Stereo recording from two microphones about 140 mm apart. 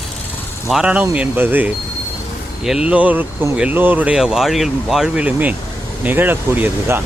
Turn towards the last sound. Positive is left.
turn(degrees=-15)  # may be behind; listen again after turning